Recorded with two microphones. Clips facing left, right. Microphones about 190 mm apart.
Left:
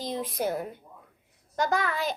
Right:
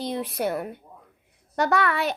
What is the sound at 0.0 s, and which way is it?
A woman's voice, 65° right (ahead or behind).